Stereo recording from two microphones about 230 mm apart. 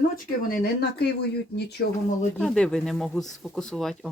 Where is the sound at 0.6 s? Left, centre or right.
Left.